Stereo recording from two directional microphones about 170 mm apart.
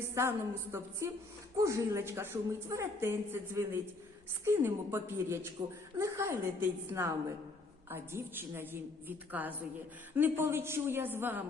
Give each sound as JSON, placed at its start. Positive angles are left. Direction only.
{"t": 0.1, "sound": "a woman's voice", "side_deg": -15}